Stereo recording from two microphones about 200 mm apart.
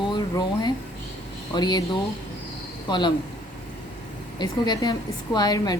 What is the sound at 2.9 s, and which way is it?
Speech, 20° left (ahead or behind).